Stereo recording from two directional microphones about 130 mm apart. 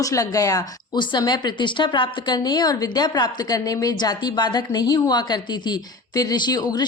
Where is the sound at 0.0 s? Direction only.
25° left (ahead or behind).